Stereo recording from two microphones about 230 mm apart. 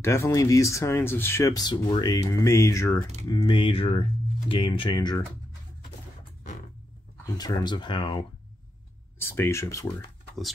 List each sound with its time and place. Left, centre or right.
0.0 s speech: centre
7.2 s speech: centre
9.2 s speech: centre